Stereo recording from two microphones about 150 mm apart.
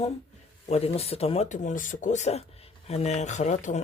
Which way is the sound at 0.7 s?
45° left (ahead or behind).